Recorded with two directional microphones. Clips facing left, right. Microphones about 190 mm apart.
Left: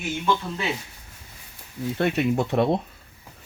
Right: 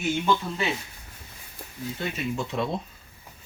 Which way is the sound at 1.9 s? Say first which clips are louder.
Left 9 dB; 65° left (ahead or behind).